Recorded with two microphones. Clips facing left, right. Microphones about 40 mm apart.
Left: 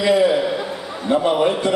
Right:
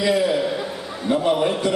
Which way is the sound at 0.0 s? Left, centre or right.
Centre.